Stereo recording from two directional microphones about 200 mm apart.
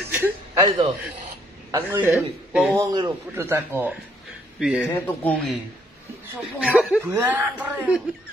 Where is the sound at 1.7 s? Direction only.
15° right (ahead or behind).